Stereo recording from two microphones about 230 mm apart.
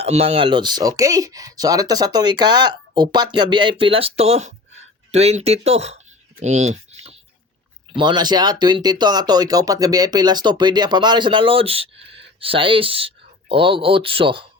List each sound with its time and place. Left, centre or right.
0.0 s speech: right
6.4 s typing: right
7.9 s speech: centre